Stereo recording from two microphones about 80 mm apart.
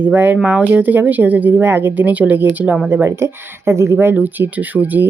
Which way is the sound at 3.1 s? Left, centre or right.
Right.